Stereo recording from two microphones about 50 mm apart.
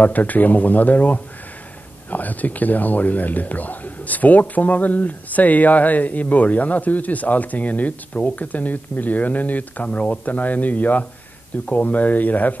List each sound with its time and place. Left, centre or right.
0.0 s speech: left